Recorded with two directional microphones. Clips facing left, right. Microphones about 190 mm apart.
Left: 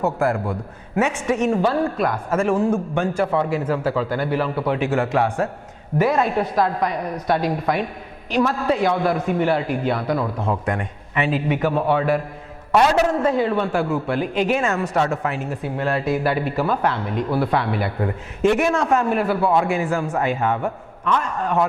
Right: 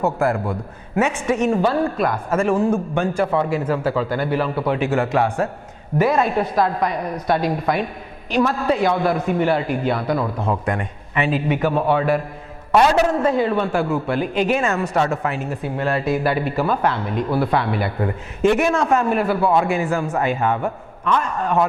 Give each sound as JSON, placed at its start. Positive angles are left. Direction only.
{"t": 0.0, "sound": "a man's voice", "side_deg": -20}